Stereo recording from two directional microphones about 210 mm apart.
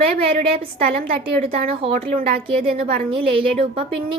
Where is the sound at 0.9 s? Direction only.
45° right (ahead or behind).